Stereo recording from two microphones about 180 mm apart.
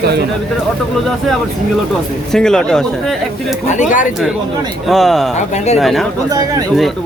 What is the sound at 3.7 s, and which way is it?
Speech, 45° left (ahead or behind).